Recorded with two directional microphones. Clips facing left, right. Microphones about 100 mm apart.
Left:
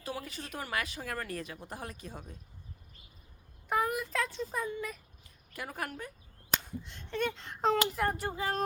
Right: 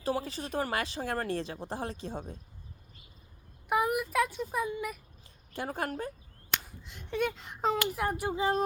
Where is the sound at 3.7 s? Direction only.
15° right (ahead or behind).